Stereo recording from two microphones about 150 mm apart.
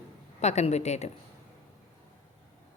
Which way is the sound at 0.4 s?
50° left (ahead or behind).